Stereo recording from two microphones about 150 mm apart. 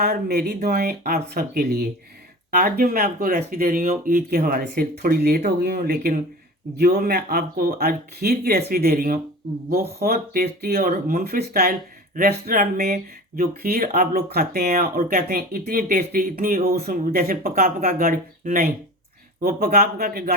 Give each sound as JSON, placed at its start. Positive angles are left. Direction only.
{"t": 0.0, "sound": "speech", "side_deg": -90}
{"t": 19.4, "sound": "speech", "side_deg": -85}